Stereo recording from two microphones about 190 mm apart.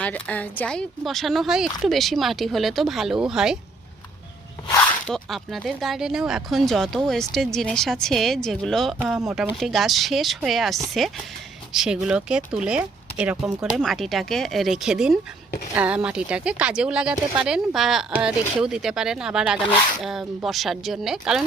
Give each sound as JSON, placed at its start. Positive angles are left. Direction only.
{"t": 0.0, "sound": "speech", "side_deg": 10}
{"t": 5.0, "sound": "speech", "side_deg": 0}